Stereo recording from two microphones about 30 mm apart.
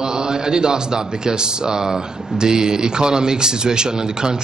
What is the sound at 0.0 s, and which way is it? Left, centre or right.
Speech, right.